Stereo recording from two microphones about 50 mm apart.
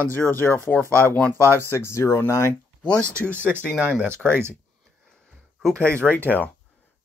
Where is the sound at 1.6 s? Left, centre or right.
Left.